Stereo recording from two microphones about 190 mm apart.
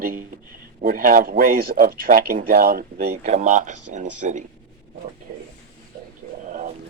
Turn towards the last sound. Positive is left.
turn(degrees=-40)  # may be behind; listen again after turning